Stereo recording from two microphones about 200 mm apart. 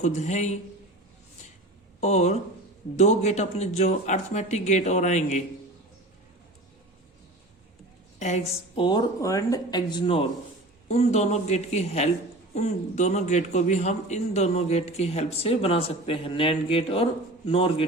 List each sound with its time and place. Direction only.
0.0 s a man's voice: 35° left (ahead or behind)
2.0 s a man's voice: 35° left (ahead or behind)
8.2 s a man's voice: 35° left (ahead or behind)